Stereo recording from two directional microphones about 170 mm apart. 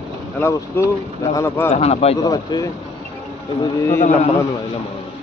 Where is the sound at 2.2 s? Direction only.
25° left (ahead or behind).